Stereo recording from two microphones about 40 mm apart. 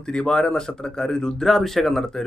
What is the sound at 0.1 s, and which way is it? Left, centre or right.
Speech, centre.